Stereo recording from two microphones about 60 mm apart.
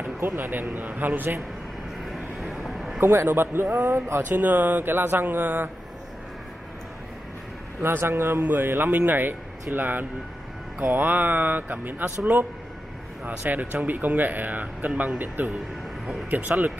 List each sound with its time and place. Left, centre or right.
0.4 s speech: right
2.5 s a sound: centre
3.0 s speech: right
7.8 s speech: right
13.2 s speech: right